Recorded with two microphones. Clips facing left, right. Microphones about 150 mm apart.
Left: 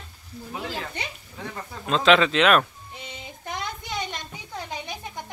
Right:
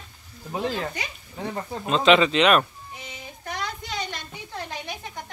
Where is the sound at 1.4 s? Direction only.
30° right (ahead or behind).